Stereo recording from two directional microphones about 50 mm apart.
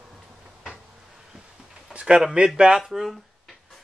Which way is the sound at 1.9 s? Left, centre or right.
Right.